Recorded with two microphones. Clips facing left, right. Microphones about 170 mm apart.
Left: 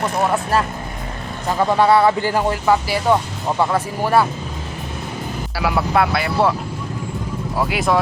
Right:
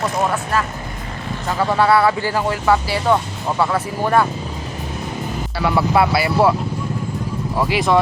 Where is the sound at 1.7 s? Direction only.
20° left (ahead or behind).